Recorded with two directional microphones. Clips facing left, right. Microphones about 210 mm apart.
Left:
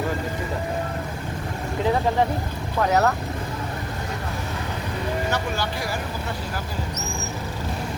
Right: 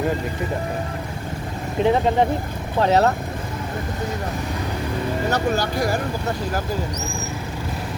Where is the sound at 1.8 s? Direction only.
20° right (ahead or behind).